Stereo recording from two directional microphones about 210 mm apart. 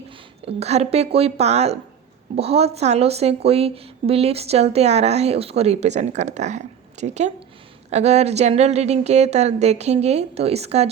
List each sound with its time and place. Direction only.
0.4 s speech: 30° right (ahead or behind)